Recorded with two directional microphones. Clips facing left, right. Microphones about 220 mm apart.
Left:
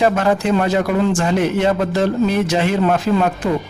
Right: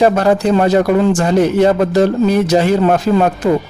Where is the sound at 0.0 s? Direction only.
35° right (ahead or behind).